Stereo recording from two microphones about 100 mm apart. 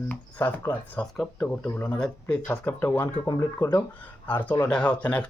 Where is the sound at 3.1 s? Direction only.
40° left (ahead or behind).